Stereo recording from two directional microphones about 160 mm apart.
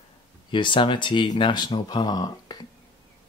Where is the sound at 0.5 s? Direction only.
30° left (ahead or behind).